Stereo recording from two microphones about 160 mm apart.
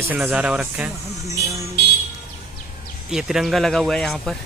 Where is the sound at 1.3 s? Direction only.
20° right (ahead or behind).